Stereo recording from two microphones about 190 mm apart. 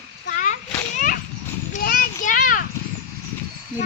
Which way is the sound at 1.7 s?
45° left (ahead or behind).